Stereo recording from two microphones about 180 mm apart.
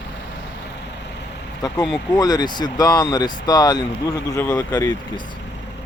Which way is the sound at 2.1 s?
20° left (ahead or behind).